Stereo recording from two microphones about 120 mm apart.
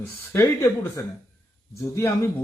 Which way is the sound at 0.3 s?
25° left (ahead or behind).